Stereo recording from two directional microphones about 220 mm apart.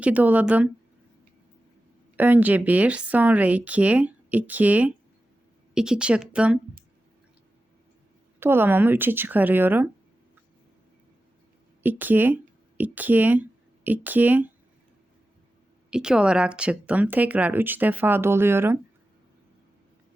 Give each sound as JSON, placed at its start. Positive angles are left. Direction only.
{"t": 0.0, "sound": "speech", "side_deg": -5}
{"t": 2.1, "sound": "a woman's voice", "side_deg": -10}
{"t": 8.4, "sound": "speech", "side_deg": -10}
{"t": 11.8, "sound": "speech", "side_deg": -10}
{"t": 15.9, "sound": "speech", "side_deg": -5}